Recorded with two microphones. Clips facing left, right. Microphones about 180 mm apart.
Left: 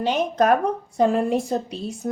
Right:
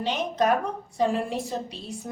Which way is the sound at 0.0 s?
45° left (ahead or behind).